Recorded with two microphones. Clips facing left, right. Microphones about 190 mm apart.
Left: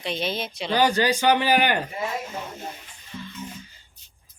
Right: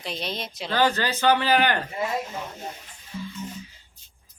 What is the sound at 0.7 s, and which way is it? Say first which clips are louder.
Speech: left 2 dB; 15° left (ahead or behind).